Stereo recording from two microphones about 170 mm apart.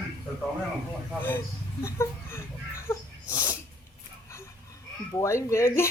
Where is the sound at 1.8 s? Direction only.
15° left (ahead or behind).